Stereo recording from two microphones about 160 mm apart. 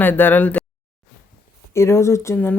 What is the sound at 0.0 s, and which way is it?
Speech, 10° left (ahead or behind).